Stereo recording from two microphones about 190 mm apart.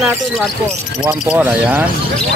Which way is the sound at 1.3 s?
5° right (ahead or behind).